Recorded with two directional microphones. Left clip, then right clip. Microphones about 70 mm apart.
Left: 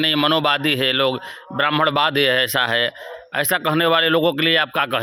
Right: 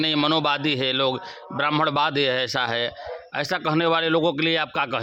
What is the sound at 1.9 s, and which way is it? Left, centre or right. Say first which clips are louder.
A man's voice: left 4 dB; left.